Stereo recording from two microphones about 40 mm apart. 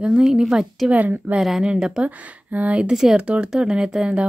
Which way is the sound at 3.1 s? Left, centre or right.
Right.